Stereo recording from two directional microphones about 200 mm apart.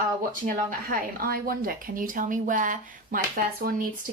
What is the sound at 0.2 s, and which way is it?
A woman's voice, 45° right (ahead or behind).